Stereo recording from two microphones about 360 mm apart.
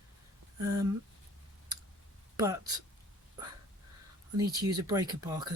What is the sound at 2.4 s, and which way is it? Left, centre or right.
Speech, centre.